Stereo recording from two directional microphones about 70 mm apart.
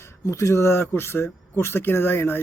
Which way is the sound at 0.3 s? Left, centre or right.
Left.